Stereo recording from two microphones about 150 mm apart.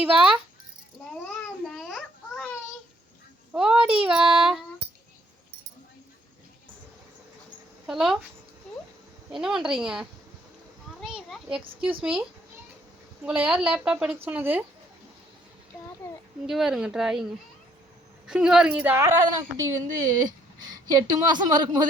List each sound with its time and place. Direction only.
0.0 s speech: 10° right (ahead or behind)
1.2 s babbling: 5° left (ahead or behind)
3.5 s a sound: 5° right (ahead or behind)
3.8 s a woman's voice: 35° right (ahead or behind)
4.1 s child singing: 5° right (ahead or behind)
7.9 s speech: 5° right (ahead or behind)
9.3 s speech: 5° right (ahead or behind)
11.0 s a sound: 5° right (ahead or behind)
11.6 s a woman's voice: 35° right (ahead or behind)
13.2 s a woman's voice: 10° right (ahead or behind)
16.5 s speech: centre (ahead or behind)
18.3 s a woman's voice: 5° right (ahead or behind); by 21.8 s 30° right (ahead or behind)